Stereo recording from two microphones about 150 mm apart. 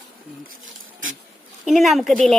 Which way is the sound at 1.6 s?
Centre (ahead or behind).